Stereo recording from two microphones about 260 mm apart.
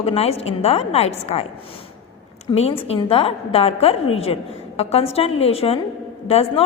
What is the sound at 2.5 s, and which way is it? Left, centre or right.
A woman's voice, left.